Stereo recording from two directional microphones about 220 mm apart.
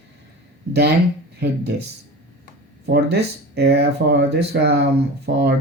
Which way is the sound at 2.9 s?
45° right (ahead or behind).